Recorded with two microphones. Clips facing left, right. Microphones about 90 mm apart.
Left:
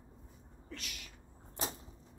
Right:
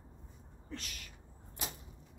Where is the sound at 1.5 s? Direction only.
30° left (ahead or behind).